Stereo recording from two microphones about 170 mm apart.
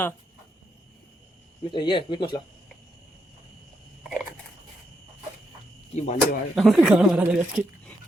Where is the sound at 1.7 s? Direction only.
25° left (ahead or behind).